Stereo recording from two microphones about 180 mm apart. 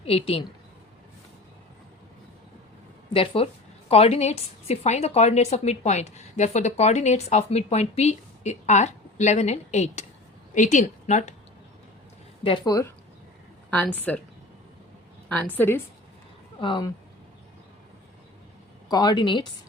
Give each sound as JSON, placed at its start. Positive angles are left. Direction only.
{"t": 0.0, "sound": "a woman's voice", "side_deg": 30}
{"t": 3.1, "sound": "a woman's voice", "side_deg": 30}
{"t": 12.4, "sound": "a woman's voice", "side_deg": 30}
{"t": 13.7, "sound": "a woman's voice", "side_deg": 10}
{"t": 15.3, "sound": "a woman's voice", "side_deg": 10}
{"t": 16.6, "sound": "a woman's voice", "side_deg": 25}
{"t": 18.9, "sound": "a woman's voice", "side_deg": 20}